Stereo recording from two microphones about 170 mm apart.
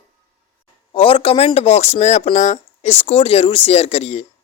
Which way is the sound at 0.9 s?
30° left (ahead or behind).